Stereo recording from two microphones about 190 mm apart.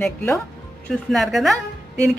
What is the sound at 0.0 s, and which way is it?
Speech, 10° left (ahead or behind).